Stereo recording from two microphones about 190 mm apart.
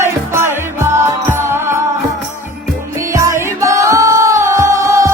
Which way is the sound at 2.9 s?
15° right (ahead or behind).